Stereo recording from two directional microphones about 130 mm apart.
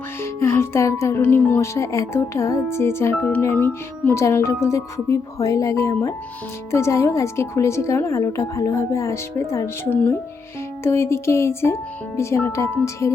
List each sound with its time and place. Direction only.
0.2 s speech: 20° left (ahead or behind)